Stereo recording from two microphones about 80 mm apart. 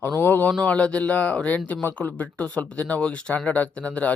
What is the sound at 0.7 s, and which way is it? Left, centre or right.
Speech, centre.